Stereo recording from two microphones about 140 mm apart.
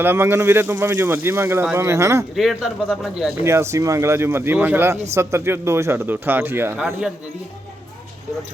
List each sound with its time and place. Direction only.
0.0 s speech: 15° right (ahead or behind)
2.3 s speech: centre (ahead or behind)
3.4 s speech: 20° right (ahead or behind)